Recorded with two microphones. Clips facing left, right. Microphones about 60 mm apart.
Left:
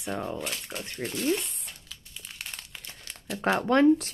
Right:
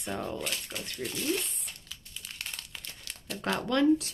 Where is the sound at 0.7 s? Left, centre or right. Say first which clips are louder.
Left 2 dB; left.